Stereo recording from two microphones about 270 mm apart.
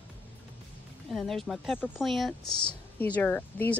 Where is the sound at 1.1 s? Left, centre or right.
Centre.